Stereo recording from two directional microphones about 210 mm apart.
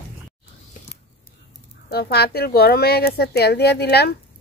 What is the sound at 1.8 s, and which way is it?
Speech, 50° left (ahead or behind).